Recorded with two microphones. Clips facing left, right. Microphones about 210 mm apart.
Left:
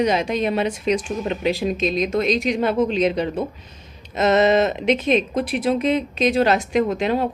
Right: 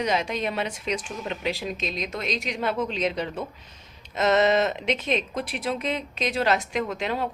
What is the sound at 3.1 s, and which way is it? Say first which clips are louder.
Speech: left 7 dB; 30° left (ahead or behind).